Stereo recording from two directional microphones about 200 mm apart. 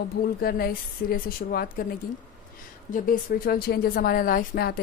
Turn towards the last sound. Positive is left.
turn(degrees=50)  # may be behind; listen again after turning